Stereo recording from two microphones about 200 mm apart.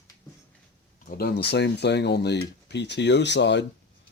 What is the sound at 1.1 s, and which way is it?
Speech, 50° left (ahead or behind).